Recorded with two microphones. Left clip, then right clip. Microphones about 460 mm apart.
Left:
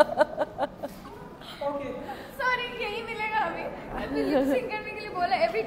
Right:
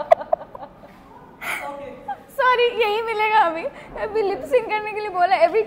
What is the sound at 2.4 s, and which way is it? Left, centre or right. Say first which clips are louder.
A woman's voice: right 11 dB; right.